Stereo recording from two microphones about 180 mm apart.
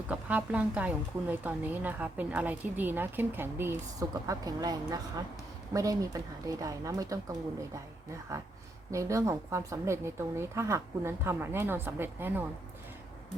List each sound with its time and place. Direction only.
0.1 s a woman's voice: 10° right (ahead or behind)